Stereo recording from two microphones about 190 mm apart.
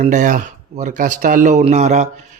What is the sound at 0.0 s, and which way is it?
A man's voice, 40° right (ahead or behind).